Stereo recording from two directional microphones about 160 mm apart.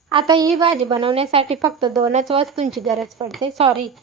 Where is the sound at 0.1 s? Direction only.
30° right (ahead or behind).